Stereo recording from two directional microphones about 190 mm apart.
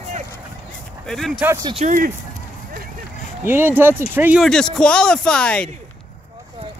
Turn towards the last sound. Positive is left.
turn(degrees=5)  # may be behind; listen again after turning